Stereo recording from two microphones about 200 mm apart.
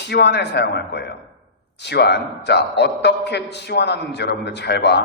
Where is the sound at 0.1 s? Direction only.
55° left (ahead or behind).